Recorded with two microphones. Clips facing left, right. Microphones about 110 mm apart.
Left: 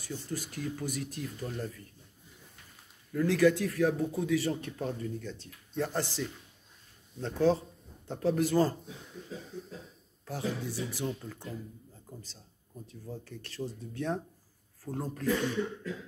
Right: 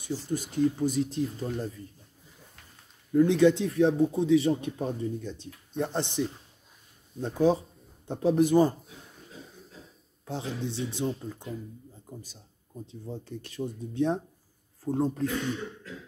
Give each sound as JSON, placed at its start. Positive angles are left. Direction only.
{"t": 0.0, "sound": "speech", "side_deg": -20}
{"t": 3.1, "sound": "speech", "side_deg": -25}
{"t": 10.2, "sound": "speech", "side_deg": -25}
{"t": 11.3, "sound": "speech", "side_deg": -15}